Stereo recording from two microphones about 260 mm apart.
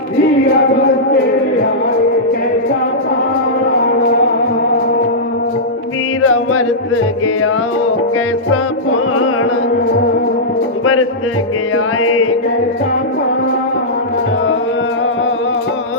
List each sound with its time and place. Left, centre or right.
6.2 s music: left
8.4 s music: left
12.0 s music: left